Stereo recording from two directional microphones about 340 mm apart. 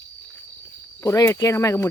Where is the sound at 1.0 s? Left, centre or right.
Centre.